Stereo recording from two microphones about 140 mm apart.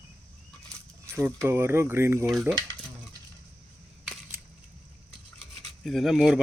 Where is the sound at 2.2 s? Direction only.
Centre (ahead or behind).